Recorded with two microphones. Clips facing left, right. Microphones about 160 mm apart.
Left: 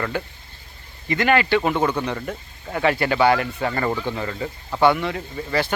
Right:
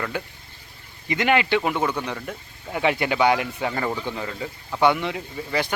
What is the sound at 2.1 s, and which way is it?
Speech, centre (ahead or behind).